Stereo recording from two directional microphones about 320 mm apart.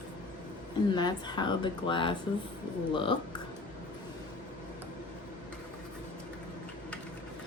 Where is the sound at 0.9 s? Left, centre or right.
Centre.